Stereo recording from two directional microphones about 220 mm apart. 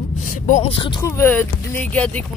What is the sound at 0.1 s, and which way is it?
Speech, 35° left (ahead or behind).